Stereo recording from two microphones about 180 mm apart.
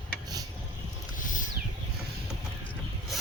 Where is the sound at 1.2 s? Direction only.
45° left (ahead or behind).